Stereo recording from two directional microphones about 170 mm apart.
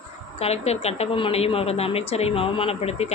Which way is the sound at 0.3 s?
35° left (ahead or behind).